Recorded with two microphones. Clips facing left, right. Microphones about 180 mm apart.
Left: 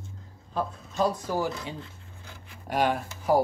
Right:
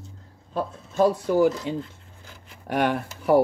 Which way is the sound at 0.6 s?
55° right (ahead or behind).